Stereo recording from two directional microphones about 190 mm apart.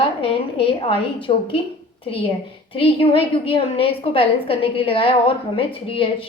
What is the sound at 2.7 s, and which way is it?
A woman's voice, 30° left (ahead or behind).